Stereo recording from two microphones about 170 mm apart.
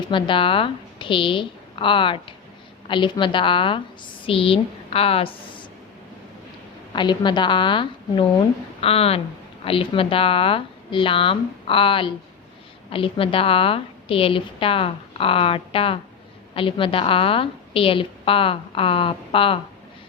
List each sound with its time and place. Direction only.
0.1 s a woman's voice: 30° left (ahead or behind)
6.9 s a woman's voice: 25° left (ahead or behind)